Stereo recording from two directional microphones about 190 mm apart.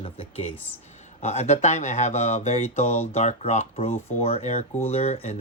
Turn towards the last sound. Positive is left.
turn(degrees=35)  # may be behind; listen again after turning